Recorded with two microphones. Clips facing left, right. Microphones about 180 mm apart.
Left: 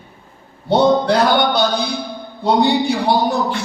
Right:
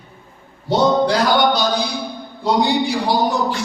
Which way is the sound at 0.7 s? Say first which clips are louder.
Left 2 dB; 60° left (ahead or behind).